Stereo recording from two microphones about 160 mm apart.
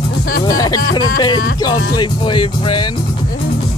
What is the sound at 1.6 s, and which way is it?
Speech, 30° left (ahead or behind).